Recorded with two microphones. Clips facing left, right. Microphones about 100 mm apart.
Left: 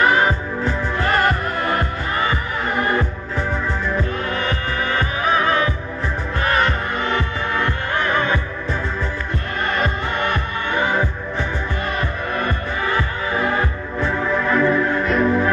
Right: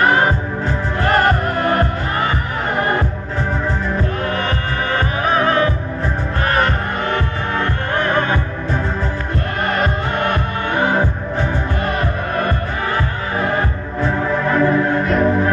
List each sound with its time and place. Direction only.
0.0 s music: 45° right (ahead or behind)
4.3 s music: 50° right (ahead or behind)
9.7 s music: 50° right (ahead or behind)
14.0 s music: 30° right (ahead or behind)